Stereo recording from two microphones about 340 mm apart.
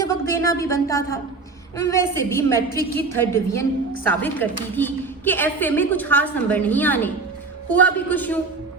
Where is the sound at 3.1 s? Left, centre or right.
Centre.